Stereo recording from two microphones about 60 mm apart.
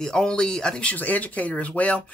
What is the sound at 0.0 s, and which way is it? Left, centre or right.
Speech, centre.